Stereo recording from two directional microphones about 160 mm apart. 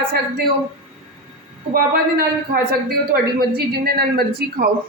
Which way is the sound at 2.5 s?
70° right (ahead or behind).